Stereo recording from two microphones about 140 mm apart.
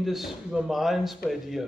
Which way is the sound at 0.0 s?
Centre (ahead or behind).